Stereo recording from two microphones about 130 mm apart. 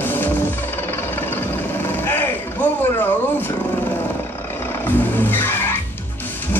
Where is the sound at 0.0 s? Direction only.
15° left (ahead or behind).